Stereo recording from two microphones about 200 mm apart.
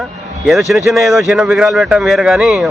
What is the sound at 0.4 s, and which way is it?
A man's voice, centre (ahead or behind).